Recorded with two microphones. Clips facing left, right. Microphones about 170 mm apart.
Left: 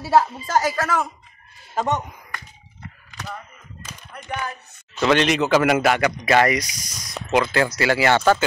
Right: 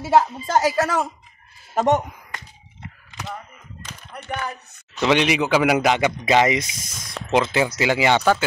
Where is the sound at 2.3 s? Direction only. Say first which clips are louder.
Even; 20° right (ahead or behind).